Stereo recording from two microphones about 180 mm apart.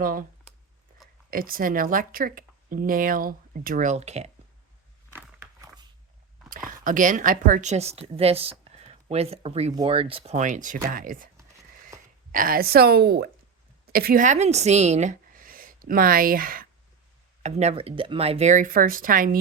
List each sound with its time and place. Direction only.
0.0 s speech: 50° right (ahead or behind)
1.3 s speech: 55° right (ahead or behind); by 4.3 s 35° right (ahead or behind)
6.7 s a woman's voice: 50° right (ahead or behind)
12.3 s a woman's voice: 50° right (ahead or behind)
17.4 s speech: 35° right (ahead or behind)